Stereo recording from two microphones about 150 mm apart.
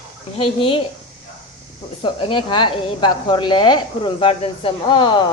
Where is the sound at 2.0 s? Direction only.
35° left (ahead or behind).